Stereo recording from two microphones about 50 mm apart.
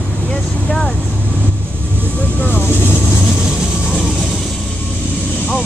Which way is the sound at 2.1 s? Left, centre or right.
Left.